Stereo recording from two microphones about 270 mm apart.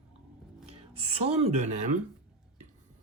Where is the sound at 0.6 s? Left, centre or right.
Right.